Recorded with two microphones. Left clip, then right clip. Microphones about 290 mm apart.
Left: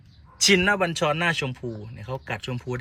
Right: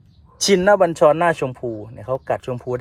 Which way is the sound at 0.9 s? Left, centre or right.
Right.